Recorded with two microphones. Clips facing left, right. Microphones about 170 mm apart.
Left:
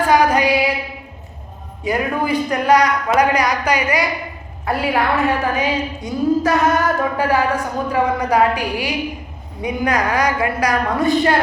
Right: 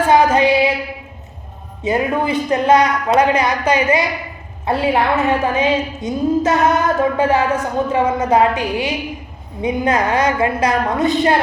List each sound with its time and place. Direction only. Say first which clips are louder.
0.1 s child singing: right 2 dB; 25° right (ahead or behind)
1.8 s a woman's voice: right 2 dB; 25° right (ahead or behind)